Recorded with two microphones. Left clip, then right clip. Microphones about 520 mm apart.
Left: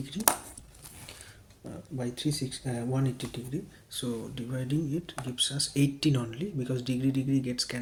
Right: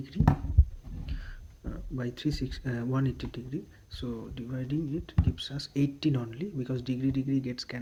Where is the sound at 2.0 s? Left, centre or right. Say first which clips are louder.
Left 1 dB; right.